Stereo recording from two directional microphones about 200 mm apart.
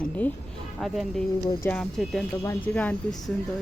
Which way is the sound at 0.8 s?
Centre (ahead or behind).